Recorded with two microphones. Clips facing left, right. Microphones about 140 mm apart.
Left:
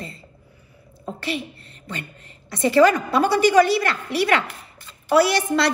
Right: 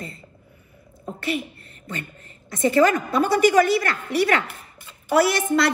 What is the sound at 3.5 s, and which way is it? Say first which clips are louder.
A woman's voice: left 2 dB; 25° left (ahead or behind).